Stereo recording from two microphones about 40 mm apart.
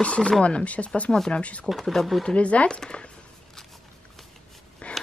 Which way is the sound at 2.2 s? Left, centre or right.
Left.